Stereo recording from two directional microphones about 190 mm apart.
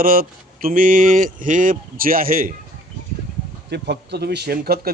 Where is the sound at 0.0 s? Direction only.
50° right (ahead or behind).